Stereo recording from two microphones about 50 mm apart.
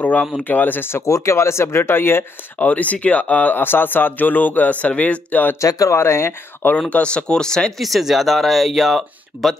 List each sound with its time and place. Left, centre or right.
0.4 s speech: left
1.0 s speech: left
2.6 s speech: left
3.5 s speech: left
5.6 s speech: left
6.9 s speech: left
7.8 s speech: centre